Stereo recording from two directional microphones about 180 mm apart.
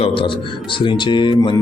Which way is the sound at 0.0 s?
30° left (ahead or behind).